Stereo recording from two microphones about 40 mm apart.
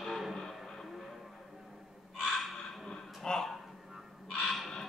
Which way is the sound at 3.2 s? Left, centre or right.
Centre.